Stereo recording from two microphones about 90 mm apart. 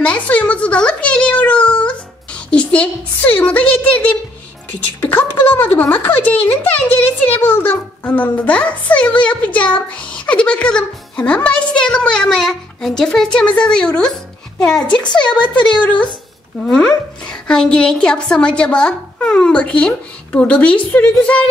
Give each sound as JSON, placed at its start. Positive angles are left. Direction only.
{"t": 0.0, "sound": "a sound", "side_deg": 15}
{"t": 4.7, "sound": "a child's voice", "side_deg": 20}
{"t": 15.2, "sound": "a woman's voice", "side_deg": 55}
{"t": 16.6, "sound": "a child's voice", "side_deg": 10}